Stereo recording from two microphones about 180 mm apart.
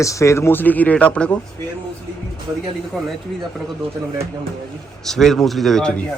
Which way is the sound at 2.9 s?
Centre (ahead or behind).